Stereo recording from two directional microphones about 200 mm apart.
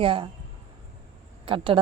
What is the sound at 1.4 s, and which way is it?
Speech, 25° right (ahead or behind).